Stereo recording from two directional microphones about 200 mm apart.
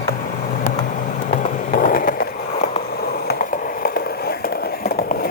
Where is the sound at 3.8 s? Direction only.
50° left (ahead or behind).